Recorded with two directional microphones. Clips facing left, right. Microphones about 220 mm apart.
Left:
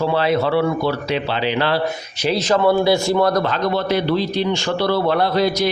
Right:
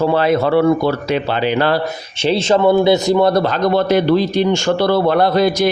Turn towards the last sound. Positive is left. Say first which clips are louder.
# right 4 dB
turn(degrees=-50)  # may be behind; listen again after turning